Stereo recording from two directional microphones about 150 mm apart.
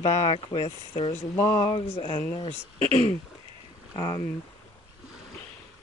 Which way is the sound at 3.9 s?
25° left (ahead or behind).